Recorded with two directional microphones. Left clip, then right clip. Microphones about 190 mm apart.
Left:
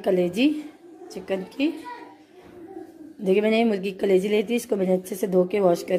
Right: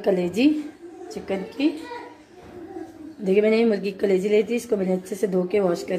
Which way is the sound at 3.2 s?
45° left (ahead or behind).